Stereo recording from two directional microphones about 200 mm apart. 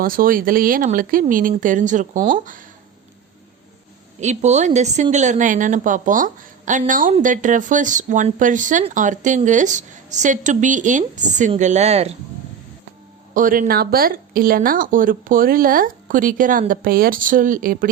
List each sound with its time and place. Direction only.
0.0 s a woman's voice: 45° right (ahead or behind)
4.2 s a woman's voice: 35° right (ahead or behind)
13.3 s speech: 40° right (ahead or behind)